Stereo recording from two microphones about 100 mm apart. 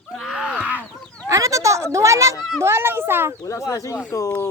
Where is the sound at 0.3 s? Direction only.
10° right (ahead or behind).